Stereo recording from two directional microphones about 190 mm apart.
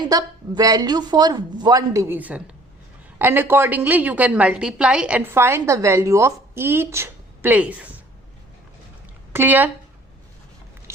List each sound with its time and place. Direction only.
0.0 s a woman's voice: 20° right (ahead or behind)
9.3 s a woman's voice: 10° right (ahead or behind)